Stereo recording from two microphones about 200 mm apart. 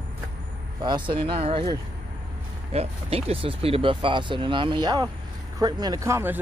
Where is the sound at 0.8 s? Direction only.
25° right (ahead or behind).